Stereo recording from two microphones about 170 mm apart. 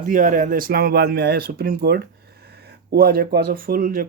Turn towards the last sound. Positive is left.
turn(degrees=-55)  # may be behind; listen again after turning